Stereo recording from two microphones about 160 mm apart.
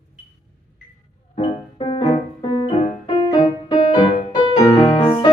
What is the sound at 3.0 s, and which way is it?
Music, 30° left (ahead or behind).